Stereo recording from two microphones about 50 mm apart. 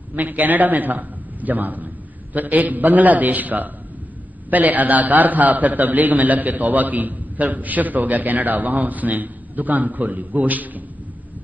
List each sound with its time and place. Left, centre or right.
0.1 s a man's voice: right